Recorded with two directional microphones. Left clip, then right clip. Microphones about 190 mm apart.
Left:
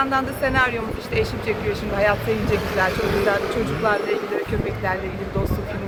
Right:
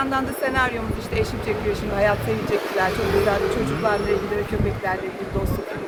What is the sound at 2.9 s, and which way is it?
Speech, 45° left (ahead or behind).